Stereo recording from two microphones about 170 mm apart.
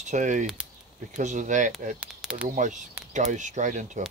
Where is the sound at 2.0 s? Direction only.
5° right (ahead or behind).